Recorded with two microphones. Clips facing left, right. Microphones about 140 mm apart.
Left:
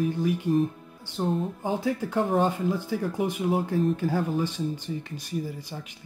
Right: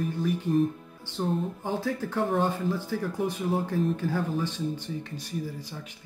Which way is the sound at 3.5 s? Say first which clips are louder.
Left 3 dB; centre (ahead or behind).